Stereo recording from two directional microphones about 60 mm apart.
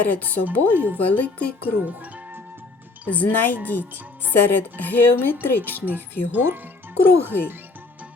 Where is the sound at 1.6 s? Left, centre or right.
Right.